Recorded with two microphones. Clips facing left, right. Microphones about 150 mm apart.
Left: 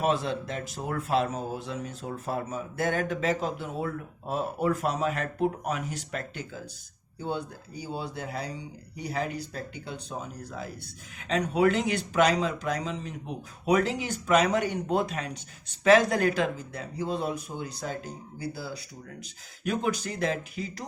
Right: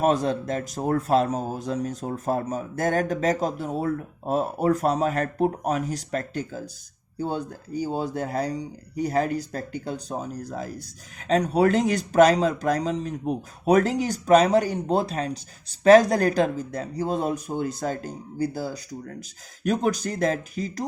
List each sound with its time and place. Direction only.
0.0 s speech: 40° right (ahead or behind)